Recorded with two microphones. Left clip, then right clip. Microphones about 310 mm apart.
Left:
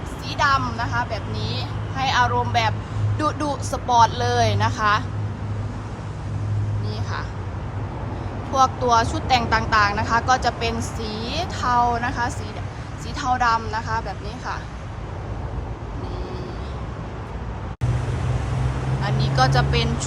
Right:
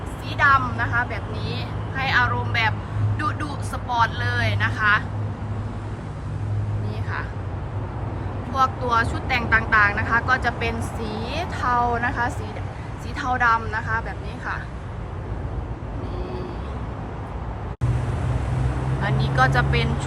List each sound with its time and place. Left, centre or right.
0.3 s a woman's voice: centre
8.5 s a woman's voice: centre
19.0 s speech: centre